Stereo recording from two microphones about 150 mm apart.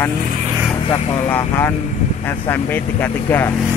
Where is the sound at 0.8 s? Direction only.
40° left (ahead or behind).